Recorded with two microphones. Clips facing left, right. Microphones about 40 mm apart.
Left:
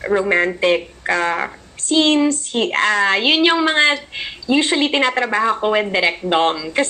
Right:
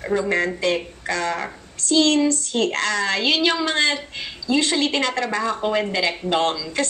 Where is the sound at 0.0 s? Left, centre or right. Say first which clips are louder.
Left 5 dB; left.